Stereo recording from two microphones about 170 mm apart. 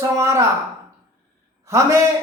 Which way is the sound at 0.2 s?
15° right (ahead or behind).